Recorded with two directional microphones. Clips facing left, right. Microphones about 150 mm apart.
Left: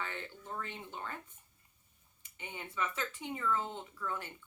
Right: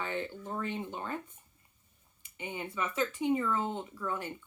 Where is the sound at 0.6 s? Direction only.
15° right (ahead or behind).